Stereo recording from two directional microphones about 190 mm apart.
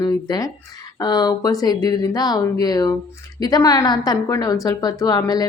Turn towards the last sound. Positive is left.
turn(degrees=20)  # may be behind; listen again after turning